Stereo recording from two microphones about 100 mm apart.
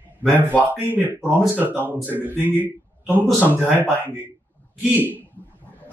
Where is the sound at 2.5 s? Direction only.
20° left (ahead or behind).